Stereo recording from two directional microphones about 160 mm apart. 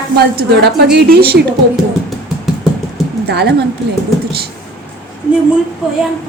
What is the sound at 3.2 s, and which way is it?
Speech, 90° right.